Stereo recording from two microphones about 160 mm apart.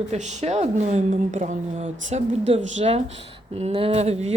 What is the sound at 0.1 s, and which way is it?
Speech, 45° right (ahead or behind).